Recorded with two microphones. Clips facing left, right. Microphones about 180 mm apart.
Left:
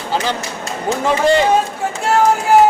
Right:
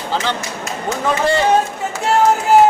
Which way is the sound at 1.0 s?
20° left (ahead or behind).